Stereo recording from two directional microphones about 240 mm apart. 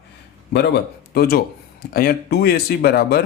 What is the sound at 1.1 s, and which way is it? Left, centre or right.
A man's voice, left.